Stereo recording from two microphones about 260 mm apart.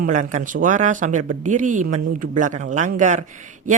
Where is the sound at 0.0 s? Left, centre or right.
Right.